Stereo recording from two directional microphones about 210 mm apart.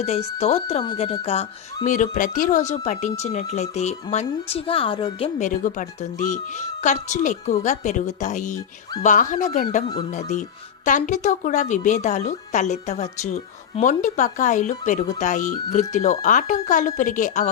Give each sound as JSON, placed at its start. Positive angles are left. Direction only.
{"t": 0.0, "sound": "speech", "side_deg": 30}
{"t": 9.8, "sound": "speech", "side_deg": 25}
{"t": 10.1, "sound": "speech", "side_deg": 35}